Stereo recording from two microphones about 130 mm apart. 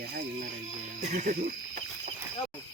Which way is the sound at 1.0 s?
70° right (ahead or behind).